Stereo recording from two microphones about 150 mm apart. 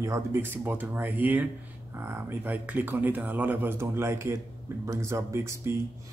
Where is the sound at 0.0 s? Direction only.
15° right (ahead or behind).